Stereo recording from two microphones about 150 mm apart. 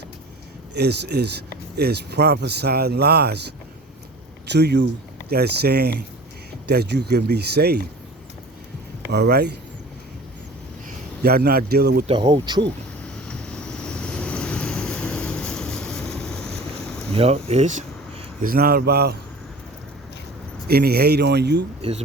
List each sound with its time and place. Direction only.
0.8 s speech: 90° right
5.3 s speech: 90° right
9.1 s speech: 90° right
10.8 s speech: 90° right
12.0 s speech: 30° right (ahead or behind)
13.2 s vehicle: 5° left (ahead or behind)
17.2 s speech: 40° right (ahead or behind)
18.4 s a man's voice: 85° right
20.7 s speech: 90° right
21.8 s speech: 40° right (ahead or behind)